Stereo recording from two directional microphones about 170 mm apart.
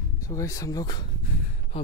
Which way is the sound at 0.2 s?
20° left (ahead or behind).